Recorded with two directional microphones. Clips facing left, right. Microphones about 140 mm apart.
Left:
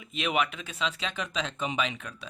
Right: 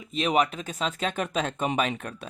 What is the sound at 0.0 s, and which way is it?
Speech, 35° right (ahead or behind).